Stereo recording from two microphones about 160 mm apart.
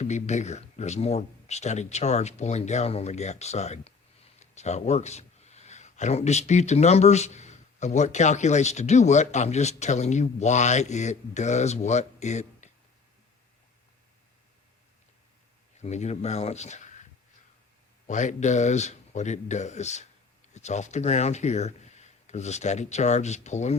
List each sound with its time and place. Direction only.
0.0 s speech: 45° left (ahead or behind)
15.8 s speech: 45° left (ahead or behind)
18.0 s speech: 50° left (ahead or behind)